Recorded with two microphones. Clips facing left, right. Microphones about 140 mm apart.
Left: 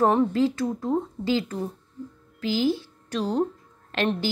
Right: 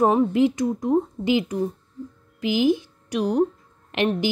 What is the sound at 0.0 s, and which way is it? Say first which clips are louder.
A woman's voice: right 2 dB; 10° right (ahead or behind).